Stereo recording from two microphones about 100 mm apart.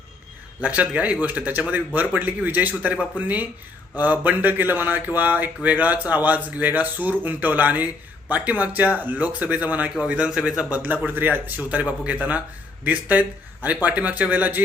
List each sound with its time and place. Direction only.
0.6 s speech: 15° right (ahead or behind)
10.8 s a man's voice: 20° right (ahead or behind)